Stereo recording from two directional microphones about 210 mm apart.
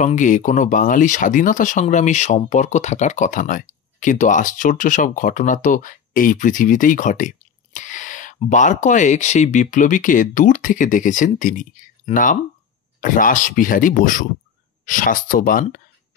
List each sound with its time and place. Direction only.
0.0 s speech: 35° left (ahead or behind)